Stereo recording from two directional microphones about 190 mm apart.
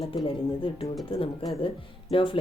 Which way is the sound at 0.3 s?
30° left (ahead or behind).